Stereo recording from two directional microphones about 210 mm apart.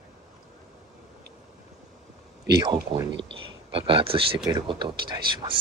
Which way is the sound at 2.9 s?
25° right (ahead or behind).